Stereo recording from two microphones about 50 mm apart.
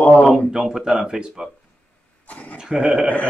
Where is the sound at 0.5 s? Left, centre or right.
Centre.